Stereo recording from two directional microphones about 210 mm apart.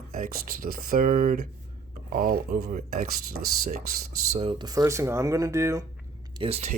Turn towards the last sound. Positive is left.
turn(degrees=-30)  # may be behind; listen again after turning